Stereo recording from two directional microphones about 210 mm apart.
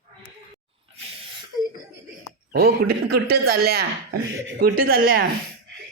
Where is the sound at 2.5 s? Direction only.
50° right (ahead or behind).